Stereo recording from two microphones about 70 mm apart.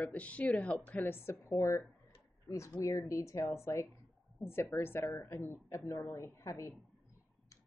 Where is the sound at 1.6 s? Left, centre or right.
Left.